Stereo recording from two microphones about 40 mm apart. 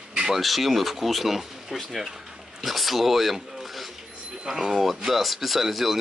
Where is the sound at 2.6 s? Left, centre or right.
Centre.